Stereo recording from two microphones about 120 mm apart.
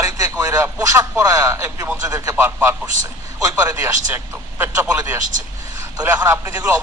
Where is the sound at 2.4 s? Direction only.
20° right (ahead or behind).